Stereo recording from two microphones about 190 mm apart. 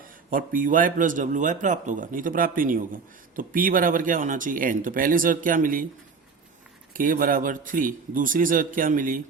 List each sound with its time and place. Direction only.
0.0 s a man's voice: 45° right (ahead or behind)
6.9 s a man's voice: 45° right (ahead or behind)